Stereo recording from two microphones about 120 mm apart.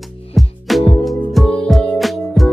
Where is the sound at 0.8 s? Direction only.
55° left (ahead or behind).